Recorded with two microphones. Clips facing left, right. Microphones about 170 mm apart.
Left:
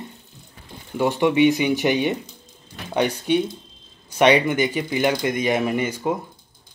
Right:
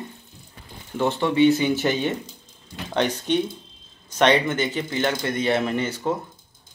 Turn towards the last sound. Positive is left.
turn(degrees=10)  # may be behind; listen again after turning